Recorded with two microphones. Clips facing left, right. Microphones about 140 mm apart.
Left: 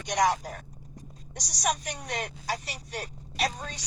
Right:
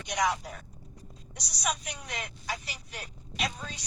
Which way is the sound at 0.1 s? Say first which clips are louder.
Left 4 dB; 40° left (ahead or behind).